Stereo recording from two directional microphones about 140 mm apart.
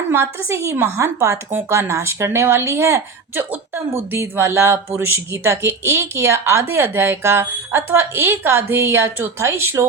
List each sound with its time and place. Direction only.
0.1 s a woman's voice: 20° right (ahead or behind)